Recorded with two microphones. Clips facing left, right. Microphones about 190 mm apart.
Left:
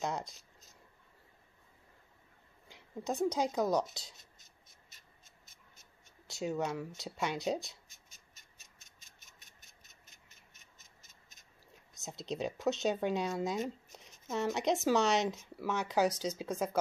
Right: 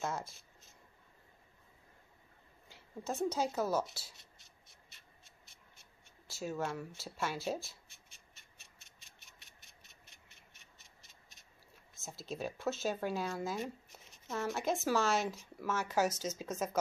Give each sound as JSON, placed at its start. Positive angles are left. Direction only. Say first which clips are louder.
{"t": 0.0, "sound": "speech", "louder": "left 2 dB", "side_deg": 15}
{"t": 0.4, "sound": "a sound", "louder": "left 1 dB", "side_deg": 40}
{"t": 2.7, "sound": "a woman's voice", "louder": "left 3 dB", "side_deg": 15}
{"t": 4.2, "sound": "a sound", "louder": "even", "side_deg": 45}
{"t": 6.4, "sound": "speech", "louder": "left 3 dB", "side_deg": 15}
{"t": 7.9, "sound": "cat", "louder": "even", "side_deg": 40}
{"t": 11.9, "sound": "speech", "louder": "left 4 dB", "side_deg": 20}